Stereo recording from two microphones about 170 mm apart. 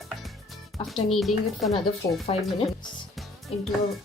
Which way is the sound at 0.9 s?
Centre (ahead or behind).